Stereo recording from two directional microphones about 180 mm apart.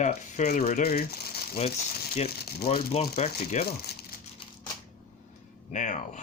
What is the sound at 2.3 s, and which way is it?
Speech, 60° left (ahead or behind).